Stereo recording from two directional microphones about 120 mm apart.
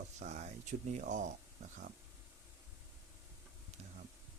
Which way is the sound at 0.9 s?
90° right.